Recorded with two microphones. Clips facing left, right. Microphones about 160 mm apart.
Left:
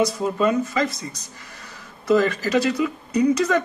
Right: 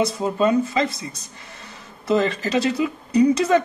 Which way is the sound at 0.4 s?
30° right (ahead or behind).